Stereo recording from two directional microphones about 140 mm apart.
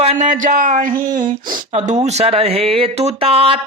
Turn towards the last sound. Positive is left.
turn(degrees=-45)  # may be behind; listen again after turning